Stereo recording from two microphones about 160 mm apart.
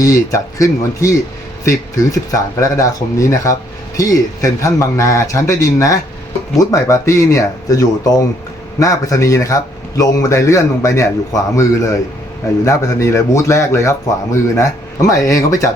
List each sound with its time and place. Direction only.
0.0 s a man's voice: 20° left (ahead or behind)